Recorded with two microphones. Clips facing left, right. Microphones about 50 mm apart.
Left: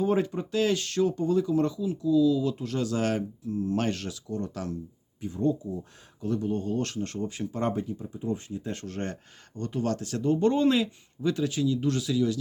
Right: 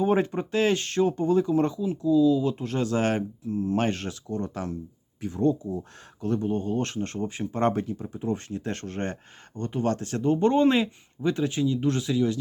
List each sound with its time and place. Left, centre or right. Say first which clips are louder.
0.0 s speech: right 2 dB; right
5.2 s speech: right 3 dB; right
6.4 s speech: right 2 dB; right
7.5 s speech: right 6 dB; right
8.9 s speech: right 2 dB; right